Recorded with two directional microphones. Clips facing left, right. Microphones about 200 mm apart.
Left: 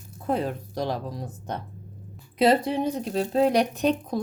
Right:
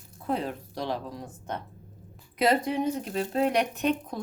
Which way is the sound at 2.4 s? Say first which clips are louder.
Left 4 dB; 30° left (ahead or behind).